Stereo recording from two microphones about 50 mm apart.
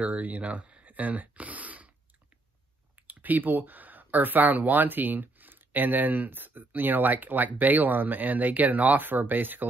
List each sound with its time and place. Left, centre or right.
0.0 s speech: right
3.1 s speech: right